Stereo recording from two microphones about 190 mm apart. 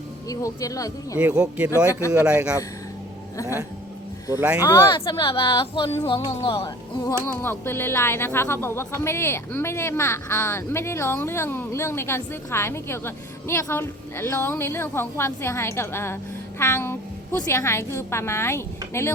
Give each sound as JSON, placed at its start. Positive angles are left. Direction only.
{"t": 0.3, "sound": "speech", "side_deg": 15}
{"t": 1.2, "sound": "speech", "side_deg": -5}
{"t": 1.9, "sound": "speech", "side_deg": 15}
{"t": 2.1, "sound": "a man's voice", "side_deg": -5}
{"t": 4.4, "sound": "speech", "side_deg": -5}
{"t": 4.9, "sound": "speech", "side_deg": 25}
{"t": 7.4, "sound": "speech", "side_deg": 10}